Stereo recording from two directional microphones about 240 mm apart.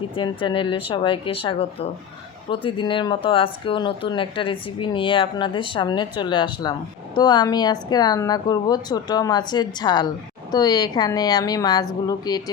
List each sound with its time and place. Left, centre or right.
0.2 s a woman's voice: centre